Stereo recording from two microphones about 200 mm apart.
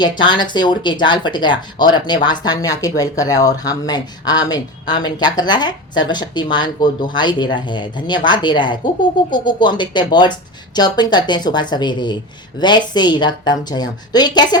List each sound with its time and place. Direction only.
0.0 s speech: 20° left (ahead or behind)